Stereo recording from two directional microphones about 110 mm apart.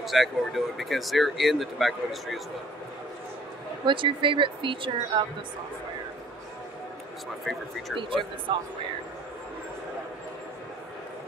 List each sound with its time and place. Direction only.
0.0 s speech: centre (ahead or behind)
3.8 s speech: 50° right (ahead or behind)
7.5 s speech: 5° right (ahead or behind)
8.0 s speech: 50° right (ahead or behind)